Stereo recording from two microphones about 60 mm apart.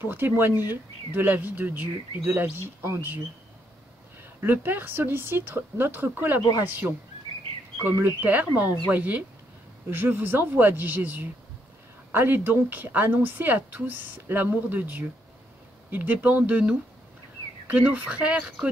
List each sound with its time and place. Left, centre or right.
0.0 s a woman's voice: right
4.4 s a woman's voice: right
8.0 s a woman's voice: right